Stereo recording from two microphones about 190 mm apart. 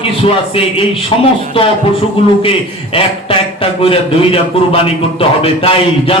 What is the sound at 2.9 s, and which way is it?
A man's voice, 30° left (ahead or behind).